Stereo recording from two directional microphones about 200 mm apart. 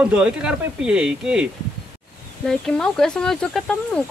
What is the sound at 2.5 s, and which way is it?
Speech, centre (ahead or behind).